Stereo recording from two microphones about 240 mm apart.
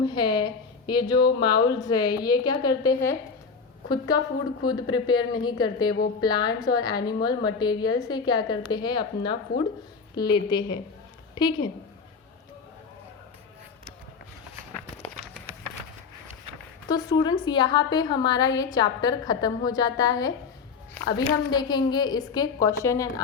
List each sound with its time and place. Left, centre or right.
0.0 s a sound: centre
0.9 s a woman's voice: centre
16.9 s a woman's voice: centre
21.5 s a woman's voice: centre